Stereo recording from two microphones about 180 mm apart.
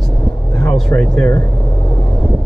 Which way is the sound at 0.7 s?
5° left (ahead or behind).